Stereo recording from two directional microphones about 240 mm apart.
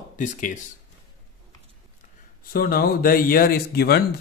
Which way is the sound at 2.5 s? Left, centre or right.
Left.